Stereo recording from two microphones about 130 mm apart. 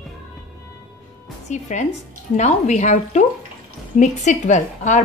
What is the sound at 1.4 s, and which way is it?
A woman's voice, 65° left (ahead or behind).